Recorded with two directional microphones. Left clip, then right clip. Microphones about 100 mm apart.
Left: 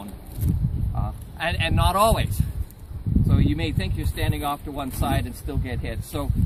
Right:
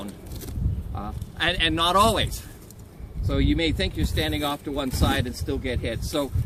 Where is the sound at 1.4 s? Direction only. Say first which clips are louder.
Right 3 dB; 30° left (ahead or behind).